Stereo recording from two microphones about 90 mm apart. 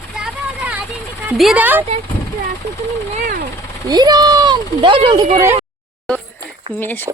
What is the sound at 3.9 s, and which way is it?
A child's voice, 50° right (ahead or behind).